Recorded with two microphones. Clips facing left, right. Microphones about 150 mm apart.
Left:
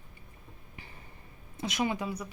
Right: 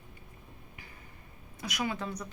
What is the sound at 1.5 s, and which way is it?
Speech, 25° left (ahead or behind).